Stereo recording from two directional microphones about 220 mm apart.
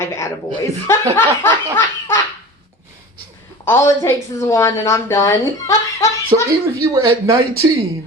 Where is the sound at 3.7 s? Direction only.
10° left (ahead or behind).